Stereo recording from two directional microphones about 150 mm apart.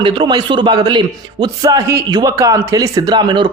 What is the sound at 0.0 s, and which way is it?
A man's voice, 30° right (ahead or behind).